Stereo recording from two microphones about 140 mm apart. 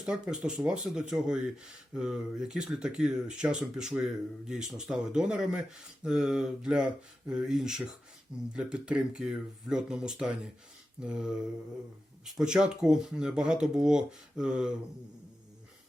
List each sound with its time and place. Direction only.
0.0 s speech: 5° right (ahead or behind)